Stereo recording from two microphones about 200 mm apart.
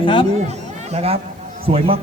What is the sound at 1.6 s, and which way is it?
Speech, 30° right (ahead or behind).